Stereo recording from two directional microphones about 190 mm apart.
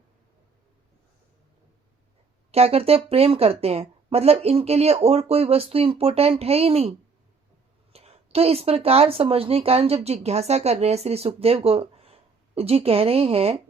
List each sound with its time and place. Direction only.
2.5 s speech: 30° right (ahead or behind)
7.9 s speech: 30° right (ahead or behind)